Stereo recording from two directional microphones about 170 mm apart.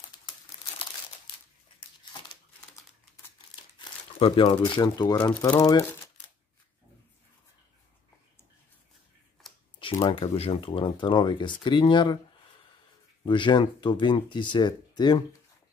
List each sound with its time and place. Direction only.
3.7 s speech: 30° left (ahead or behind)
9.8 s speech: 30° left (ahead or behind)
13.2 s speech: 25° left (ahead or behind)